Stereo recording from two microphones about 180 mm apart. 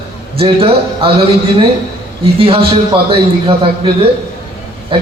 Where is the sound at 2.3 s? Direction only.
30° right (ahead or behind).